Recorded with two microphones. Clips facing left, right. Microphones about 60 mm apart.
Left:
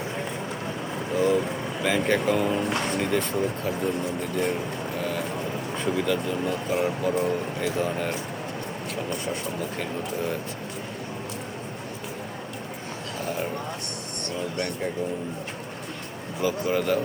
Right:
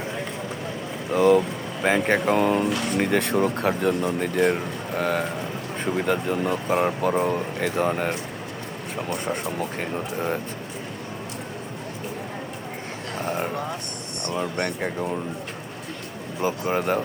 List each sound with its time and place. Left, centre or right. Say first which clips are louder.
1.1 s speech: right 5 dB; right
1.8 s speech: right 3 dB; right
9.1 s speech: right 3 dB; right
13.2 s vehicle: right 3 dB; right
14.3 s speech: right 3 dB; right
16.4 s speech: right 1 dB; right